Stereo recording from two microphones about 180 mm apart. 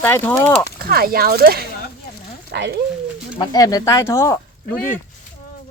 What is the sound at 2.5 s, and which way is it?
Speech, 70° right (ahead or behind).